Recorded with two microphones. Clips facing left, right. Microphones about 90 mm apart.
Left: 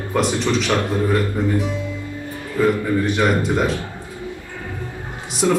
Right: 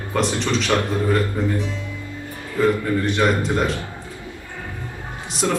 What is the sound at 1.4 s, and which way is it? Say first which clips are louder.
Speech: left 3 dB; 15° left (ahead or behind).